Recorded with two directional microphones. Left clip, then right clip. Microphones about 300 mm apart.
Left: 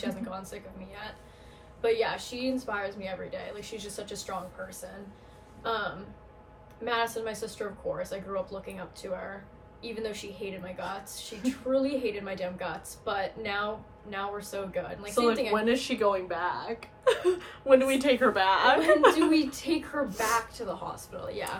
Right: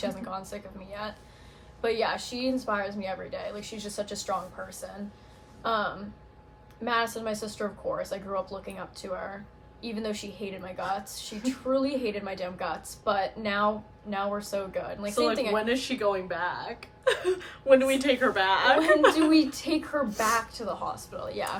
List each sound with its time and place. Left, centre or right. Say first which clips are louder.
0.0 s a woman's voice: right 3 dB; centre
5.6 s a woman's voice: right 3 dB; centre
15.5 s a woman's voice: left 1 dB; centre
19.3 s a woman's voice: right 3 dB; centre